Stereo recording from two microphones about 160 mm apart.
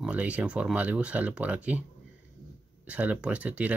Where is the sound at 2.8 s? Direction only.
10° right (ahead or behind).